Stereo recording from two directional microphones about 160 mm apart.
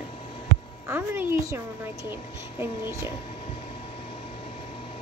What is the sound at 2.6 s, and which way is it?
Speech, 15° right (ahead or behind).